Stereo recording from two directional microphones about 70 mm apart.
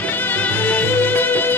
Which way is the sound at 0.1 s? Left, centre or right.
Left.